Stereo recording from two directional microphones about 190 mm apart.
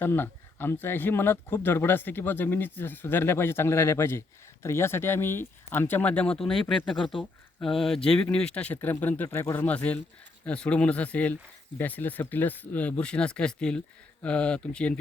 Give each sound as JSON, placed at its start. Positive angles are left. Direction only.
{"t": 0.0, "sound": "speech", "side_deg": 10}